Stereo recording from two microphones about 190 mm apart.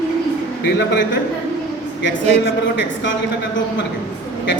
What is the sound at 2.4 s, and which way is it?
Speech, 70° left (ahead or behind).